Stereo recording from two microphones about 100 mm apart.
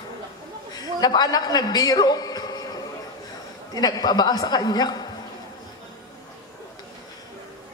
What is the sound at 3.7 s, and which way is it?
A woman's voice, 45° left (ahead or behind).